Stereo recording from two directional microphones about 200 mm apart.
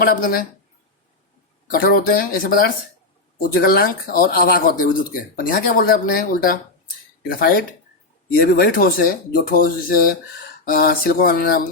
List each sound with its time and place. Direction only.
0.0 s speech: 45° left (ahead or behind)
1.7 s speech: 45° left (ahead or behind)